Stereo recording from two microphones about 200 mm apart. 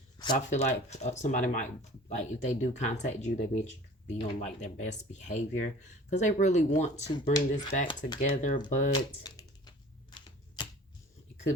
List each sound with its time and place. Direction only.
0.3 s speech: 35° left (ahead or behind)
8.9 s typing: 20° left (ahead or behind)
10.6 s a sound: 20° left (ahead or behind)